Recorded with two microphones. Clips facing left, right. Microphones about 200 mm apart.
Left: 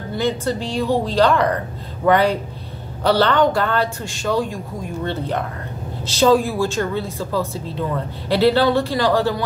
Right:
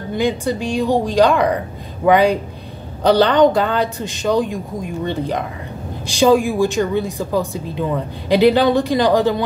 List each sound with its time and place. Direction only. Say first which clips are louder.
0.1 s speech: right 2 dB; 15° right (ahead or behind)